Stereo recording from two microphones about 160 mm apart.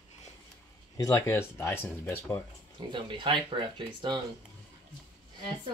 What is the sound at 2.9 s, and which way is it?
Speech, 30° right (ahead or behind).